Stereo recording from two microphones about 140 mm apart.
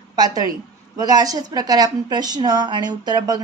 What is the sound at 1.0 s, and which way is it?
A woman's voice, 25° right (ahead or behind).